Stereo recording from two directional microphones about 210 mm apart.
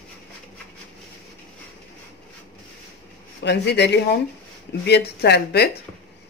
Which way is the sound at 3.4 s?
55° left (ahead or behind).